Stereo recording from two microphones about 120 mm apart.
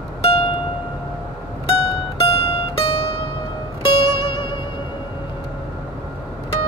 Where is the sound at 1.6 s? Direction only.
55° left (ahead or behind).